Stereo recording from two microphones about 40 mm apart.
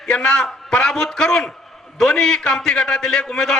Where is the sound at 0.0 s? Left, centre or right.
Left.